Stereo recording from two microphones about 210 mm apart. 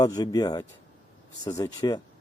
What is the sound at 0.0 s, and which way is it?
Speech, 20° left (ahead or behind).